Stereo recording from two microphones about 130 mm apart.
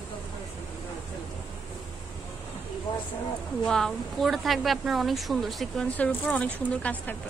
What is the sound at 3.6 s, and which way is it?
A woman's voice, 5° left (ahead or behind).